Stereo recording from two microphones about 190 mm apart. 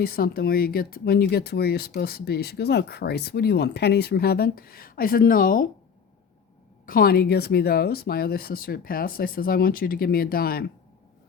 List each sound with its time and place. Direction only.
0.0 s speech: 55° left (ahead or behind)
6.8 s speech: 50° left (ahead or behind)